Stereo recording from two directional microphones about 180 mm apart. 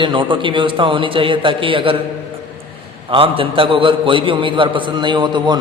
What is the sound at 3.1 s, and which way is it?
A man's voice, 30° right (ahead or behind).